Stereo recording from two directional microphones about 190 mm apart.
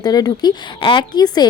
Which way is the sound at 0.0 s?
20° left (ahead or behind).